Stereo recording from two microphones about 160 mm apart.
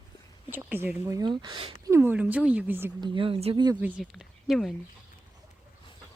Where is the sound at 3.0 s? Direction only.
30° right (ahead or behind).